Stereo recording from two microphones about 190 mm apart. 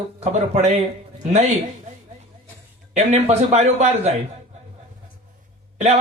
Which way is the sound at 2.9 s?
35° right (ahead or behind).